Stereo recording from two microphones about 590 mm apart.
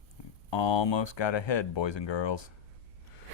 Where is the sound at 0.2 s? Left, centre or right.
Left.